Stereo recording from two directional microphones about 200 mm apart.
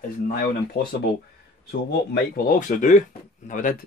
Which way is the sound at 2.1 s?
50° left (ahead or behind).